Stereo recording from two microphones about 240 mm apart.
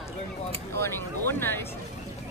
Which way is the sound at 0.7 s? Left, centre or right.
Centre.